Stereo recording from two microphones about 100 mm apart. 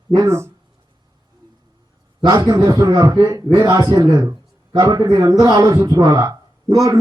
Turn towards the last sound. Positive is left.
turn(degrees=-35)  # may be behind; listen again after turning